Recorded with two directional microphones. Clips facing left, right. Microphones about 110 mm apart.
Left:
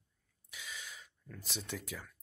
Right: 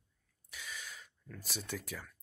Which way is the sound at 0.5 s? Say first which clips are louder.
Right 1 dB; 15° left (ahead or behind).